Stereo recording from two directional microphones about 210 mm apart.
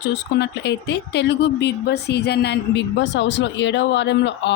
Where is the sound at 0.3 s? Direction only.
55° left (ahead or behind).